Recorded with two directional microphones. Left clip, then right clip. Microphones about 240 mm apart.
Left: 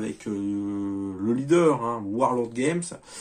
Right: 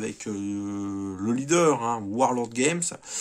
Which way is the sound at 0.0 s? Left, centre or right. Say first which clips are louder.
Left 2 dB; right.